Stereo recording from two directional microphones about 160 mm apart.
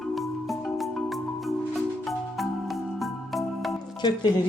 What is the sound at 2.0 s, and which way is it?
Music, centre (ahead or behind).